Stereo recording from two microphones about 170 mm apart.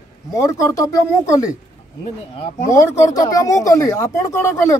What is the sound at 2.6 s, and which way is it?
A man's voice, 20° left (ahead or behind).